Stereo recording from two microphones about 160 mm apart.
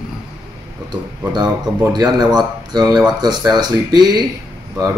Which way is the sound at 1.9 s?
25° right (ahead or behind).